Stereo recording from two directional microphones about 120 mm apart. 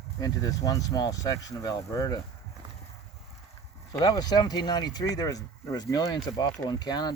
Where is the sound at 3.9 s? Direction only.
30° left (ahead or behind).